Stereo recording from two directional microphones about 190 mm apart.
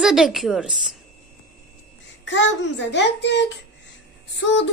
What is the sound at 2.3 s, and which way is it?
A child's voice, 70° left (ahead or behind).